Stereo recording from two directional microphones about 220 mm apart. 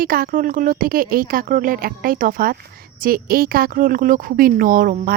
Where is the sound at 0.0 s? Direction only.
40° right (ahead or behind).